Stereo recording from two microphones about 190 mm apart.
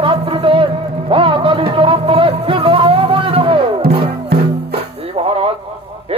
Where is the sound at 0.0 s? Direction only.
30° right (ahead or behind).